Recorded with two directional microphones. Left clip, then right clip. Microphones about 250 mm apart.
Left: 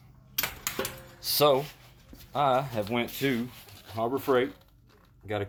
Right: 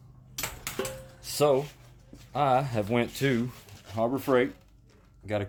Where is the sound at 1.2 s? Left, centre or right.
Centre.